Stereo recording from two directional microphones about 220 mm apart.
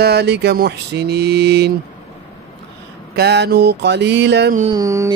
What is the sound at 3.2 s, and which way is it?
Mantra, 50° right (ahead or behind).